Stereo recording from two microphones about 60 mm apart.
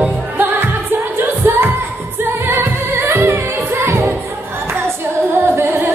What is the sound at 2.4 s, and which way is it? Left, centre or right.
Music, right.